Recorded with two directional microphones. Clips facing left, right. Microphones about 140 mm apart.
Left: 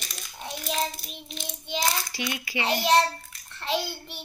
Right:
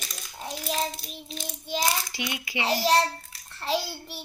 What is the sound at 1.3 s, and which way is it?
Child singing, 40° right (ahead or behind).